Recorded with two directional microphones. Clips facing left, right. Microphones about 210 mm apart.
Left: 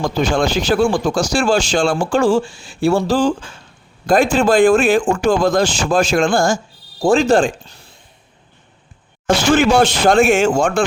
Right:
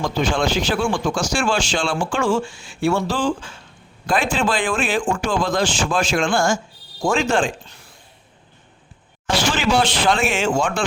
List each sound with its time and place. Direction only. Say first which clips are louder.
0.0 s speech: left 4 dB; 40° left (ahead or behind)
9.2 s speech: left 7 dB; 45° left (ahead or behind)